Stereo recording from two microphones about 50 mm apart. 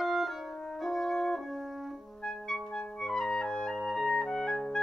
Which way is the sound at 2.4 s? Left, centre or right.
Centre.